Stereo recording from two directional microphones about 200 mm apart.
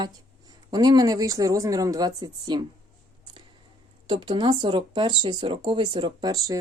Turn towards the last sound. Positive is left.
turn(degrees=-20)  # may be behind; listen again after turning